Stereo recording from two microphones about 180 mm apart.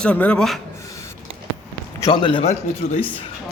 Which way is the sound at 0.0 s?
5° left (ahead or behind).